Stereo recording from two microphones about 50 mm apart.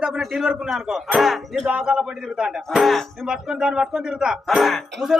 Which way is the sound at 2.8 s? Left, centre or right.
Centre.